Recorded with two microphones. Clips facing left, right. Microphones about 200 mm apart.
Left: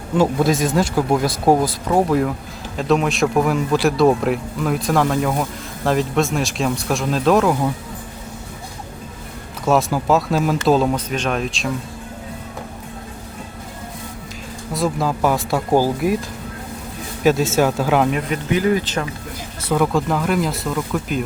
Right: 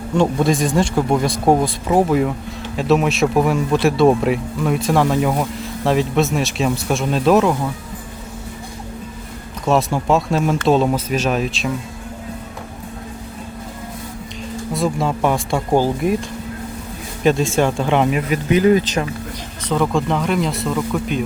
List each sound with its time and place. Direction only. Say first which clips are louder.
0.2 s speech: even; 5° left (ahead or behind)
9.6 s speech: even; centre (ahead or behind)
14.7 s speech: even; centre (ahead or behind)
17.2 s speech: even; 5° left (ahead or behind)
18.5 s speech: right 4 dB; 20° right (ahead or behind)
19.6 s speech: even; 5° left (ahead or behind)